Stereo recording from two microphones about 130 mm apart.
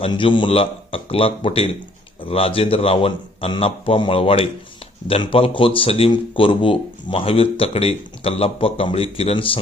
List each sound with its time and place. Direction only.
0.0 s a man's voice: 40° left (ahead or behind)